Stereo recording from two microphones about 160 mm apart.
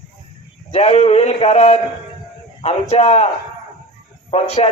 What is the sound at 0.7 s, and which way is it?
A man's voice, 40° left (ahead or behind).